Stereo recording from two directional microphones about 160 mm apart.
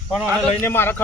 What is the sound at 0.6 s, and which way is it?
Speech, 15° left (ahead or behind).